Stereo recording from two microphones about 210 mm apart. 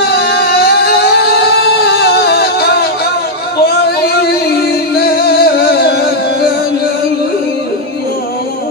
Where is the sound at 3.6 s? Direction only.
50° left (ahead or behind).